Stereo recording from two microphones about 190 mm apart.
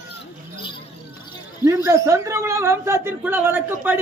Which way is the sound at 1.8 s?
15° right (ahead or behind).